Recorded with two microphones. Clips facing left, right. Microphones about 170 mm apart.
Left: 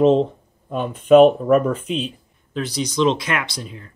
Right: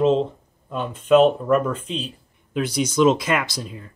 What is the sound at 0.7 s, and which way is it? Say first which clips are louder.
Speech: left 4 dB; 10° left (ahead or behind).